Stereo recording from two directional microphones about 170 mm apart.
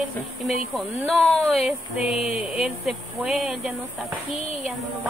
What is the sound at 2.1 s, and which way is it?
Speech, 40° left (ahead or behind).